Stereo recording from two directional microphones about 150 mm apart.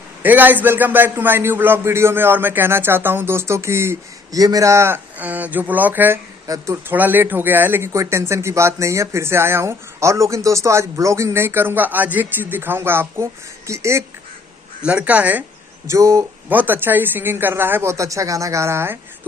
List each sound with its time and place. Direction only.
0.2 s speech: 10° right (ahead or behind)
14.8 s speech: 10° right (ahead or behind)